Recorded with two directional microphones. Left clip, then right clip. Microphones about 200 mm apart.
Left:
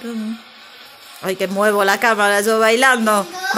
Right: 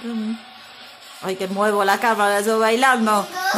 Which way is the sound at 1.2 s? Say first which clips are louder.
Left 4 dB; 15° left (ahead or behind).